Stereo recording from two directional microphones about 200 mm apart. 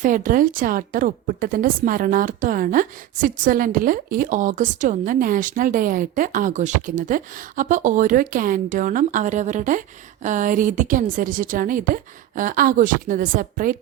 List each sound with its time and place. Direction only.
0.0 s a woman's voice: 40° right (ahead or behind)